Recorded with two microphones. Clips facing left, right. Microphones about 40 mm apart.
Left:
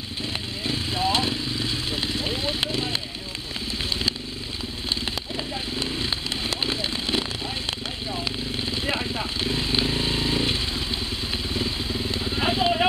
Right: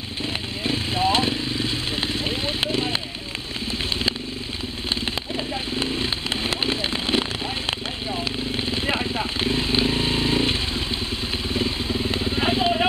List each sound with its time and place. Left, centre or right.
0.7 s vehicle: centre
2.0 s a sound: centre
4.8 s a sound: centre
8.6 s vehicle: centre
9.4 s motorcycle: centre
11.4 s vehicle: centre